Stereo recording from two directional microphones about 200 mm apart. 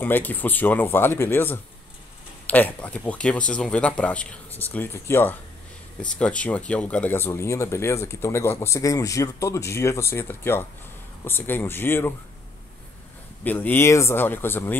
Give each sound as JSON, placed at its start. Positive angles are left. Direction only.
{"t": 0.0, "sound": "speech", "side_deg": 10}
{"t": 13.4, "sound": "speech", "side_deg": 10}